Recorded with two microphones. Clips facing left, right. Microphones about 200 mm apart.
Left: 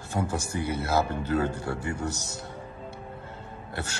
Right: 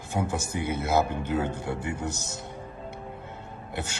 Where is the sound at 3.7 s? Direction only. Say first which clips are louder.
Right 1 dB; 20° right (ahead or behind).